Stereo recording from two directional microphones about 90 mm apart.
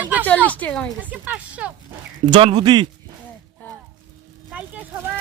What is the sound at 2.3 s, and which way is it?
Speech, 60° right (ahead or behind).